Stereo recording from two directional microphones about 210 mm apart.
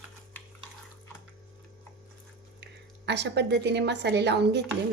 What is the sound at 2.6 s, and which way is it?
A woman's voice, 55° right (ahead or behind).